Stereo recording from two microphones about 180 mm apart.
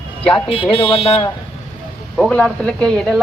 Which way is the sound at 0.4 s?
30° left (ahead or behind).